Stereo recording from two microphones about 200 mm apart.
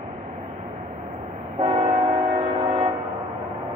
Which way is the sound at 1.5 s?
25° right (ahead or behind).